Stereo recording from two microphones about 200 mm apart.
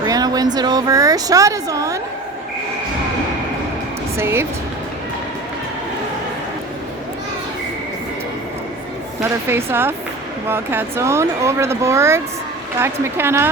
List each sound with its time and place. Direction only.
0.0 s speech: 20° right (ahead or behind)
4.2 s speech: 10° right (ahead or behind)
9.5 s speech: 10° right (ahead or behind)